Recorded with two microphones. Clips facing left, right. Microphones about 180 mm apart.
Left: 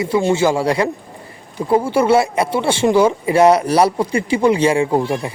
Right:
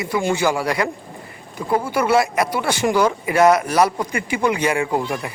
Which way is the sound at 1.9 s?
30° left (ahead or behind).